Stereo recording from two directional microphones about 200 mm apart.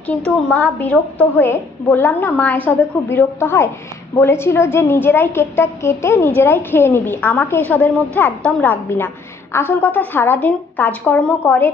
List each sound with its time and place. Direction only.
0.0 s a woman's voice: 5° left (ahead or behind)